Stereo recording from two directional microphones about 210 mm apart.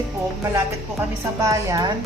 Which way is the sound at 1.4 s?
15° right (ahead or behind).